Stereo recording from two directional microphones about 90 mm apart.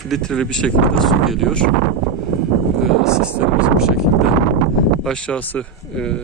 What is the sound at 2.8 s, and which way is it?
Speech, 5° right (ahead or behind).